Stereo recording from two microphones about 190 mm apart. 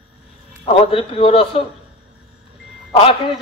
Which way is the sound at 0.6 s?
30° left (ahead or behind).